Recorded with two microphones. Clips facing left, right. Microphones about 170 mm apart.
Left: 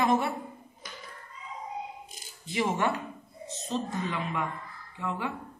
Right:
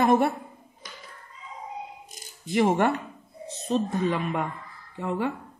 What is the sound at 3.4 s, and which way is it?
A woman's voice, 60° right (ahead or behind).